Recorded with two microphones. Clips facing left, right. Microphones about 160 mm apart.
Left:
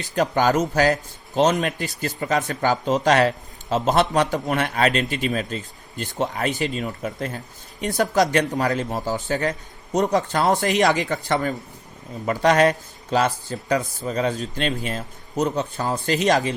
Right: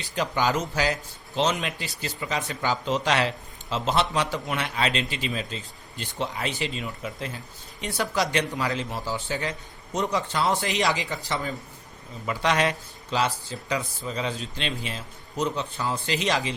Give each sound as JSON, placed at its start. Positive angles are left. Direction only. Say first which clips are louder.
{"t": 0.0, "sound": "speech", "louder": "left 6 dB", "side_deg": 45}